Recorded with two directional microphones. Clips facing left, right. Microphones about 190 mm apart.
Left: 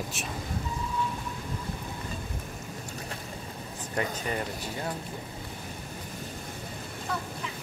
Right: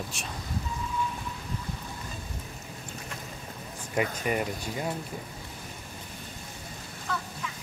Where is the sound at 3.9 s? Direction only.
15° right (ahead or behind).